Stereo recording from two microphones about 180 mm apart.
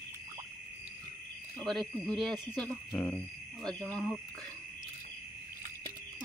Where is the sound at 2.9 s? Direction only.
15° left (ahead or behind).